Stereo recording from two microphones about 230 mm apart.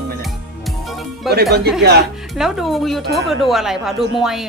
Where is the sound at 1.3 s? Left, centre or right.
Right.